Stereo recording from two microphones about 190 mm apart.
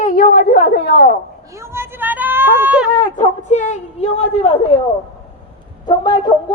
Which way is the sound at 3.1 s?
40° left (ahead or behind).